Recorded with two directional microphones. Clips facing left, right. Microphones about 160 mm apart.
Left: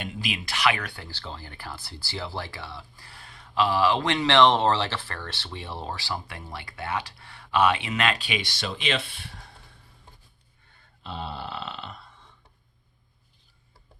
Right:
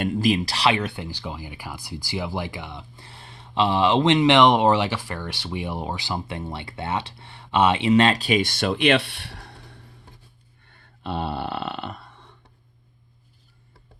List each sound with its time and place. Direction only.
0.0 s speech: 45° right (ahead or behind); by 9.8 s 65° right (ahead or behind)
11.0 s burping: 60° right (ahead or behind)